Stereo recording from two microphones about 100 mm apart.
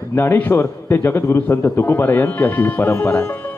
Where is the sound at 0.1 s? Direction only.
25° left (ahead or behind).